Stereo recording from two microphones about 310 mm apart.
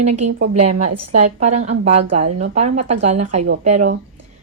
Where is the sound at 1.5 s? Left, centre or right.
Right.